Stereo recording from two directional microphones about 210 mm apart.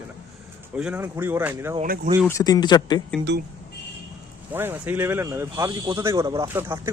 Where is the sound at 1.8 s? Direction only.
40° right (ahead or behind).